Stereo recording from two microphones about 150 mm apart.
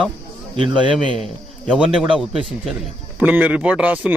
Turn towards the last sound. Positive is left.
turn(degrees=-10)  # may be behind; listen again after turning